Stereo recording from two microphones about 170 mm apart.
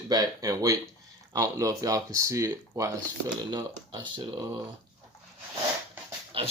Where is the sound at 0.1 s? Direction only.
20° right (ahead or behind).